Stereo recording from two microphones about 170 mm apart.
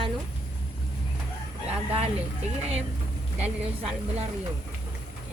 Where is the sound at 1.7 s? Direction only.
40° right (ahead or behind).